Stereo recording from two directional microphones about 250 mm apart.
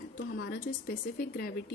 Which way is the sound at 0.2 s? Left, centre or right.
Left.